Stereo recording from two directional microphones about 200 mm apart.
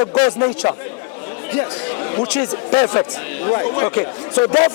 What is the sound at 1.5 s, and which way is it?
A man's voice, 20° left (ahead or behind).